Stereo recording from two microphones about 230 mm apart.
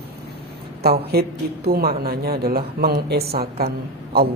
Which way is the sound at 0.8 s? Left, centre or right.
Right.